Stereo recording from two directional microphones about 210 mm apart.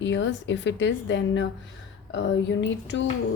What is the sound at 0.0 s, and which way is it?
Speech, 60° left (ahead or behind).